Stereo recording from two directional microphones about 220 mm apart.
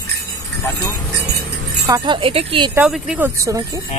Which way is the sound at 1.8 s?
20° right (ahead or behind).